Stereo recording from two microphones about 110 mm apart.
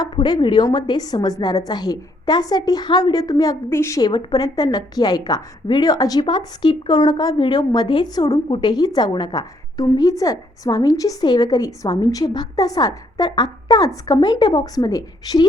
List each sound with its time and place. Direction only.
0.0 s a woman's voice: 40° left (ahead or behind)